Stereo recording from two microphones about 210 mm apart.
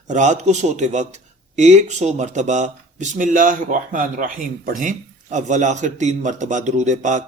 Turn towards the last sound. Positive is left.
turn(degrees=-35)  # may be behind; listen again after turning